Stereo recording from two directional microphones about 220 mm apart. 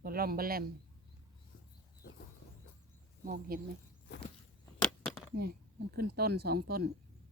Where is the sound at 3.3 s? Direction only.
40° right (ahead or behind).